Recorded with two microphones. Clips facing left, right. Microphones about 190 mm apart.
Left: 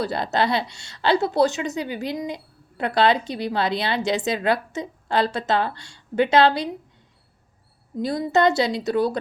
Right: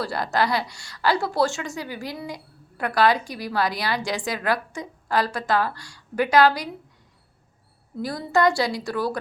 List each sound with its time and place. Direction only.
0.0 s a woman's voice: 20° left (ahead or behind)
7.9 s a woman's voice: 20° left (ahead or behind)